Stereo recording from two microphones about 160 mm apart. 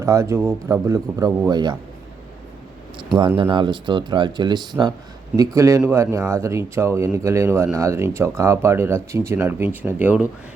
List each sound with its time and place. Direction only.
0.0 s speech: 15° right (ahead or behind)
3.0 s speech: 30° right (ahead or behind); by 10.2 s 10° right (ahead or behind)